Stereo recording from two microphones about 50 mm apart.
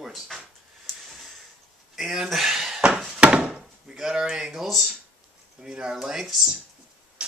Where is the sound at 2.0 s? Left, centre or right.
Centre.